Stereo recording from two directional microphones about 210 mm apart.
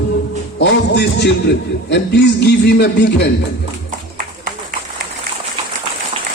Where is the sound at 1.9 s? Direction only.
55° left (ahead or behind).